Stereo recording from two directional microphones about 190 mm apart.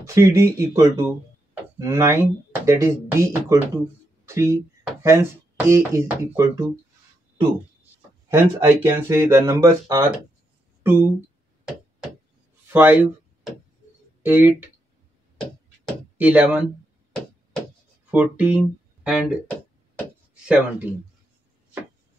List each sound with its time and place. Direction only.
0.0 s speech: 15° right (ahead or behind)
8.3 s speech: 10° right (ahead or behind)
12.7 s a sound: 10° right (ahead or behind)
14.2 s speech: 10° right (ahead or behind)
16.2 s speech: 10° right (ahead or behind)
17.1 s a sound: 5° left (ahead or behind)
18.1 s speech: 5° right (ahead or behind)
20.4 s speech: 5° right (ahead or behind)